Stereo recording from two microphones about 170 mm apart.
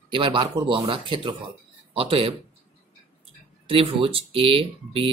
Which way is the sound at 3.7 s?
35° right (ahead or behind).